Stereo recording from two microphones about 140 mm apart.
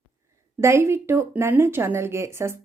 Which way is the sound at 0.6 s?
20° right (ahead or behind).